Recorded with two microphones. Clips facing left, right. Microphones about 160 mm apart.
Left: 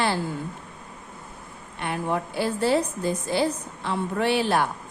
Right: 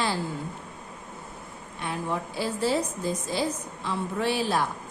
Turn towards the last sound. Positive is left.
turn(degrees=65)  # may be behind; listen again after turning